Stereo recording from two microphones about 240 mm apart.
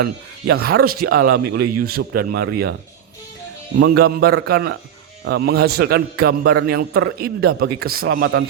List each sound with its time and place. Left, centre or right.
0.7 s a man's voice: right
3.8 s a man's voice: right
7.9 s a man's voice: right
8.1 s speech: right